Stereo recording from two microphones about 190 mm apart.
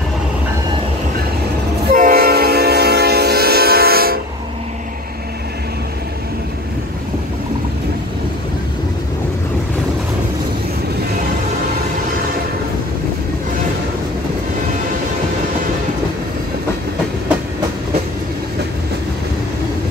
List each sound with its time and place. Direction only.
1.9 s train: 50° right (ahead or behind)